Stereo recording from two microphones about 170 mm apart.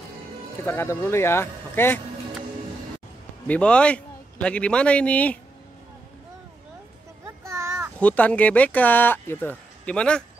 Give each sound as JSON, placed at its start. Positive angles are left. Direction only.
{"t": 0.7, "sound": "speech", "side_deg": 15}
{"t": 3.4, "sound": "speech", "side_deg": 5}
{"t": 7.4, "sound": "a sound", "side_deg": -15}
{"t": 8.0, "sound": "speech", "side_deg": 10}